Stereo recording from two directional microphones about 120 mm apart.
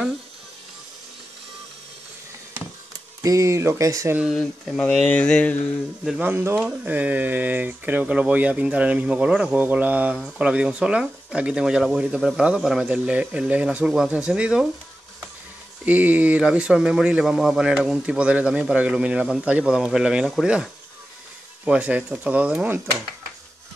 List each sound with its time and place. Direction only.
3.2 s speech: 30° right (ahead or behind)
4.3 s mantra: 5° left (ahead or behind)
6.0 s speech: 10° right (ahead or behind)
15.8 s speech: 15° right (ahead or behind)